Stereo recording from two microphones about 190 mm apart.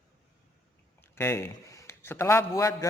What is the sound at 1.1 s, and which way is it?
A man's voice, 15° left (ahead or behind).